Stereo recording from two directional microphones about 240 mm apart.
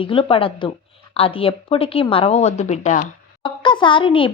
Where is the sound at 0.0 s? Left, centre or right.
Left.